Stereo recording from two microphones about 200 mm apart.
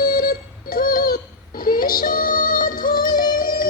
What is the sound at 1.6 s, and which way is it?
Music, 45° left (ahead or behind).